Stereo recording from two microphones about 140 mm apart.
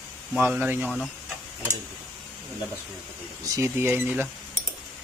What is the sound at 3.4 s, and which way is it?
Speech, 20° right (ahead or behind).